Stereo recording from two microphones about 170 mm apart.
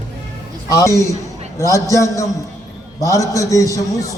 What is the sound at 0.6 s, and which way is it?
A man's voice, 20° left (ahead or behind).